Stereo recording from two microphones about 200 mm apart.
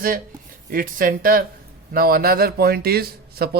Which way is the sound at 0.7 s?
45° right (ahead or behind).